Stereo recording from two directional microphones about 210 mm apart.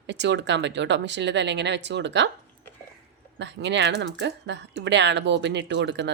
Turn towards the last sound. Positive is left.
turn(degrees=-55)  # may be behind; listen again after turning